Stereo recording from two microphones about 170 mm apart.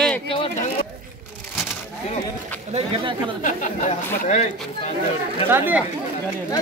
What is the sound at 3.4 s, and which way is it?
Speech, 45° left (ahead or behind).